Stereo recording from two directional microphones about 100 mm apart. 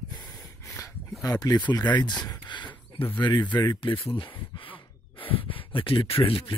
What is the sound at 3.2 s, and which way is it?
Speech, 50° left (ahead or behind).